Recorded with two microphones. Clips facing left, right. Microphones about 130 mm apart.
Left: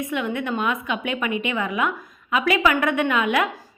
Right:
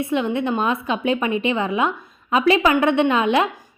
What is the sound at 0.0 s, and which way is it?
A woman's voice, 30° right (ahead or behind).